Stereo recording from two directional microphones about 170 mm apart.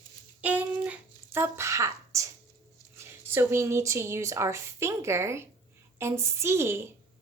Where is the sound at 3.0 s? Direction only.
15° right (ahead or behind).